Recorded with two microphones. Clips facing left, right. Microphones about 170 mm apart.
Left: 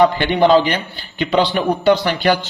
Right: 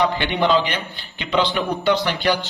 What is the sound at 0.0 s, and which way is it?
A man's voice, 45° left (ahead or behind).